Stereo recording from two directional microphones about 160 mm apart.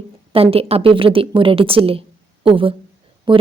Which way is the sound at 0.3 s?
35° right (ahead or behind).